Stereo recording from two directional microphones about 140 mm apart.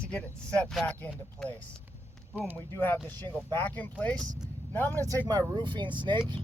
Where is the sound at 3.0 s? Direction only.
30° right (ahead or behind).